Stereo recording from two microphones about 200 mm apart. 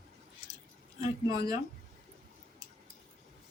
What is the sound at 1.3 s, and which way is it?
Speech, 15° right (ahead or behind).